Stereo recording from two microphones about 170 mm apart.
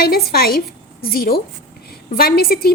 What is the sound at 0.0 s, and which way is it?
A woman's voice, 60° left (ahead or behind).